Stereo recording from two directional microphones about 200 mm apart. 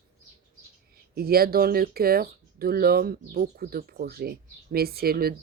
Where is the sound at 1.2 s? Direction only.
50° right (ahead or behind).